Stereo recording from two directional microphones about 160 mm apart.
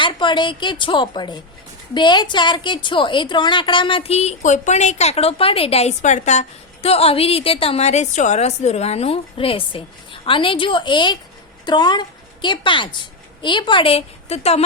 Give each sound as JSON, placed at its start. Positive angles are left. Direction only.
{"t": 0.0, "sound": "a woman's voice", "side_deg": 30}